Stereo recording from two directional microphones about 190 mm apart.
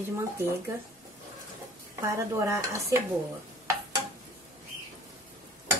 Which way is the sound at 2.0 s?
15° right (ahead or behind).